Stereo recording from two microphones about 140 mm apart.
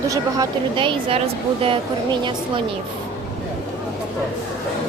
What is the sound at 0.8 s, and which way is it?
A woman's voice, 40° right (ahead or behind).